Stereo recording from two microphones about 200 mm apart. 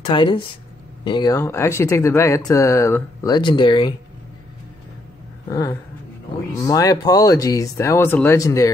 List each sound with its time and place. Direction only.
0.0 s a woman's voice: 25° left (ahead or behind)
5.5 s speech: 15° left (ahead or behind)